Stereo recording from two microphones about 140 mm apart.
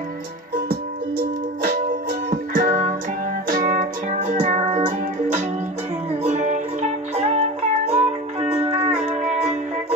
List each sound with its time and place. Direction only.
1.6 s music: 90° right
2.5 s music: 70° right (ahead or behind)
3.4 s music: 90° right; by 4.8 s 55° right (ahead or behind)
6.2 s music: 60° right (ahead or behind)